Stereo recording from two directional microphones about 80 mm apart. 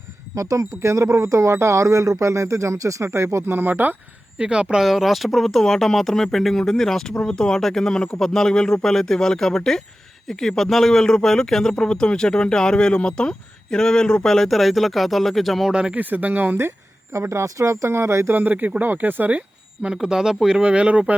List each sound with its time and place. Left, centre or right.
0.3 s speech: right
4.4 s a man's voice: centre
15.7 s speech: centre; by 18.3 s right
18.3 s speech: right